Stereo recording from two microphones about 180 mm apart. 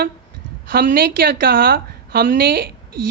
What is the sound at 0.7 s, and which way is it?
Speech, 55° right (ahead or behind).